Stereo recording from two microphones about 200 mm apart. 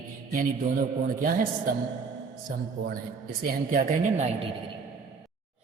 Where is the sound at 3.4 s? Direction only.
40° right (ahead or behind).